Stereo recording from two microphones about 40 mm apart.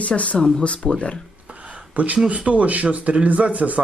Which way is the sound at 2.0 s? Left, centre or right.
Right.